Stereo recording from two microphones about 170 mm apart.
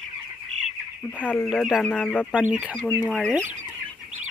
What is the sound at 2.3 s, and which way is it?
Speech, 5° right (ahead or behind).